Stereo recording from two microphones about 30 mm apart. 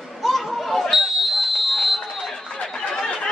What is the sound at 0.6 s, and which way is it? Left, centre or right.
Chatter, centre.